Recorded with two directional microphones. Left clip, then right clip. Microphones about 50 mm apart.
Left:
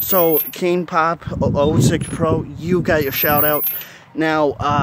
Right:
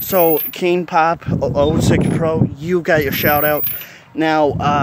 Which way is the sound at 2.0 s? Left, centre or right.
Left.